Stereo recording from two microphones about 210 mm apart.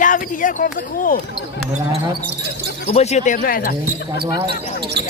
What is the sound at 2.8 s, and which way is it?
Speech, 30° left (ahead or behind).